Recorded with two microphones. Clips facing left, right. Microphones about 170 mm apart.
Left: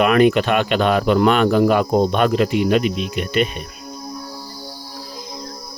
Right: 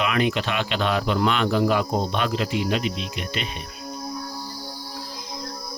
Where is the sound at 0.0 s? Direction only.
55° left (ahead or behind).